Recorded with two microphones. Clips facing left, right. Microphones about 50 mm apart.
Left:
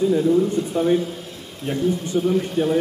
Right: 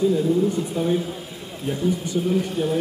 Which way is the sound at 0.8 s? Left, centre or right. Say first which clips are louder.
Left 5 dB; centre.